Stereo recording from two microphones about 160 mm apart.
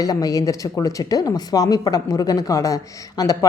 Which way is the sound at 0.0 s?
20° left (ahead or behind).